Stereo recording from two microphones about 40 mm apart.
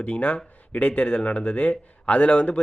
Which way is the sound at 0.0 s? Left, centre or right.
Left.